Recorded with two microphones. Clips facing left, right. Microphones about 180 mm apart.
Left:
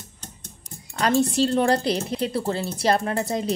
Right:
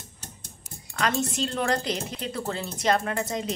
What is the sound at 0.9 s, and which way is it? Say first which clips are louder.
Speech: left 6 dB; 30° left (ahead or behind).